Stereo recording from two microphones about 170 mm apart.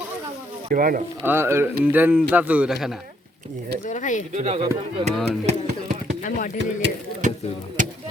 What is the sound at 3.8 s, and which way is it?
Speech, 45° left (ahead or behind).